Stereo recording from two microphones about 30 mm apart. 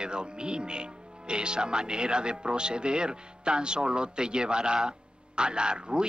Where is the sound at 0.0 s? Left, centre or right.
Right.